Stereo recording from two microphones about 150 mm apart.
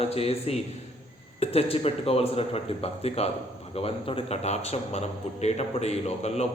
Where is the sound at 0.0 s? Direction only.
40° left (ahead or behind).